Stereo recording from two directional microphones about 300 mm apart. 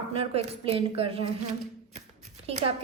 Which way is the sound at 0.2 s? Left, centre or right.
Centre.